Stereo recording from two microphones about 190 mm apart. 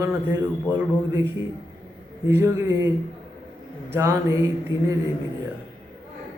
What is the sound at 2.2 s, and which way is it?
A man's voice, 15° right (ahead or behind).